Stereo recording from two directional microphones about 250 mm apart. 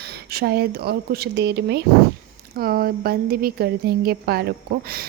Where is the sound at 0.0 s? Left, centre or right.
Right.